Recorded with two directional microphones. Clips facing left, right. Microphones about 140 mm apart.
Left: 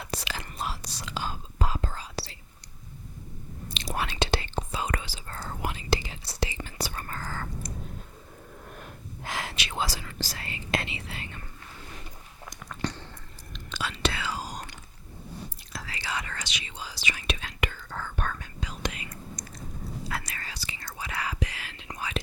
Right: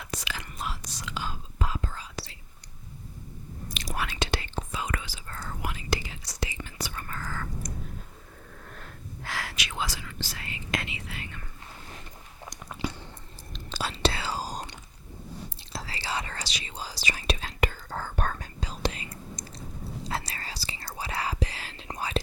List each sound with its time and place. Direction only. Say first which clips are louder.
0.0 s whispering: left 2 dB; 30° left (ahead or behind)
3.7 s whispering: left 2 dB; 25° left (ahead or behind)
8.6 s whispering: left 1 dB; 15° left (ahead or behind)
12.7 s chewing: left 1 dB; 10° right (ahead or behind)
13.5 s whispering: right 1 dB; 35° right (ahead or behind)